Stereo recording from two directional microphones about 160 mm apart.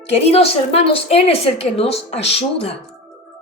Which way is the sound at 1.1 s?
40° left (ahead or behind).